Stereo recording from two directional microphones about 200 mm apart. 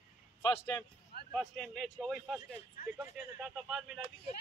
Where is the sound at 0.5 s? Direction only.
15° left (ahead or behind).